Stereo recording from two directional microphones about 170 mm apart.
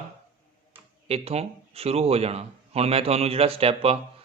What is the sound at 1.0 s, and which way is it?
A man's voice, 35° right (ahead or behind).